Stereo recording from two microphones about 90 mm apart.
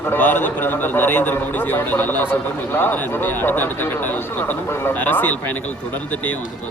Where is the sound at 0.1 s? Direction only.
20° left (ahead or behind).